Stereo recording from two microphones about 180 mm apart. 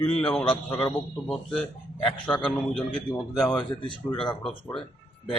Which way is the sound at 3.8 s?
25° left (ahead or behind).